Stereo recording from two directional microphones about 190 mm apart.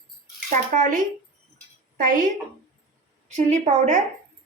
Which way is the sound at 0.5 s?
40° right (ahead or behind).